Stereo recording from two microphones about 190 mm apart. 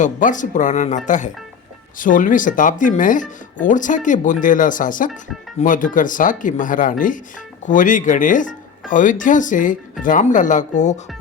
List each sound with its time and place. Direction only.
0.0 s speech: 40° left (ahead or behind)